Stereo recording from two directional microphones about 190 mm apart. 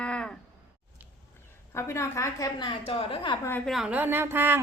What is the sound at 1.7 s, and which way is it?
A woman's voice, 15° left (ahead or behind).